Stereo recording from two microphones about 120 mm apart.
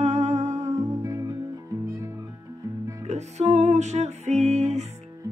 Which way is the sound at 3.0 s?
70° right (ahead or behind).